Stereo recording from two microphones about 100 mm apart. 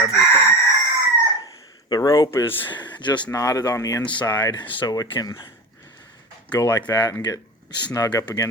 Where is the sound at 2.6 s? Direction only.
50° left (ahead or behind).